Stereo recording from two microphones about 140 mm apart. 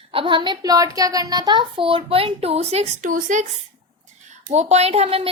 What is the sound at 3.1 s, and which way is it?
Child singing, 65° right (ahead or behind).